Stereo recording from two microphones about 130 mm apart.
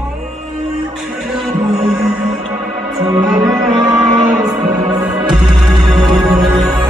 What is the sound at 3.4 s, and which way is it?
Music, 30° right (ahead or behind).